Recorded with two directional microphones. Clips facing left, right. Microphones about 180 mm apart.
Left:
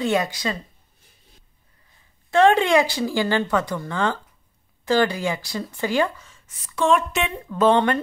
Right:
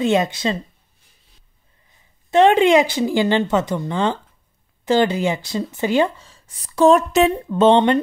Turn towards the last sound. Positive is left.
turn(degrees=-25)  # may be behind; listen again after turning